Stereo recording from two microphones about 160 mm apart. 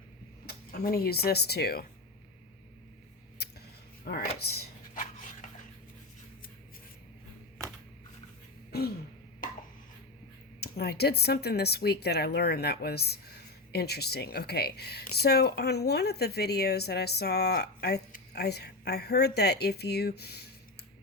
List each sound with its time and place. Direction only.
0.4 s speech: 75° left (ahead or behind)
4.0 s speech: 75° left (ahead or behind)
4.9 s a sound: 55° left (ahead or behind)
10.6 s a woman's voice: 85° left